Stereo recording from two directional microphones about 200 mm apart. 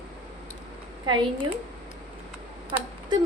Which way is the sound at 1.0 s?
20° right (ahead or behind).